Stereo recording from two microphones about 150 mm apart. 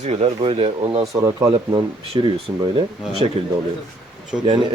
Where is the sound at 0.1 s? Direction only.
40° right (ahead or behind).